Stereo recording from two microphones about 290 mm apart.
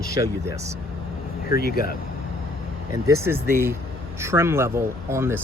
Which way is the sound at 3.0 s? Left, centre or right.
Centre.